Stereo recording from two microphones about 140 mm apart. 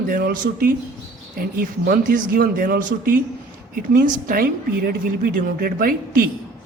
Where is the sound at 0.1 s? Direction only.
85° right.